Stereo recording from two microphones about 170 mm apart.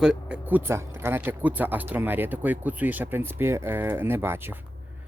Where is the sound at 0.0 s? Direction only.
5° right (ahead or behind).